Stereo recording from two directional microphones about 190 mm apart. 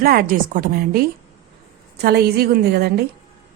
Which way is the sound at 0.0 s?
50° right (ahead or behind).